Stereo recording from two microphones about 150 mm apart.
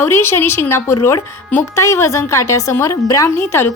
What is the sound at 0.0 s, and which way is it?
A woman's voice, 15° left (ahead or behind).